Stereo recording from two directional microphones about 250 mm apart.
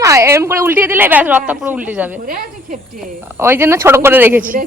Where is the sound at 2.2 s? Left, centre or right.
Right.